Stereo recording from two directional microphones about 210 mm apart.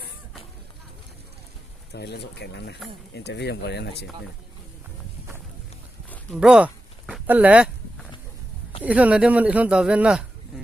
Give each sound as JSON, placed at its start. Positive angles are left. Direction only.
{"t": 1.9, "sound": "speech", "side_deg": 50}
{"t": 6.1, "sound": "a sound", "side_deg": 0}
{"t": 7.1, "sound": "speech", "side_deg": -10}
{"t": 8.8, "sound": "speech", "side_deg": -5}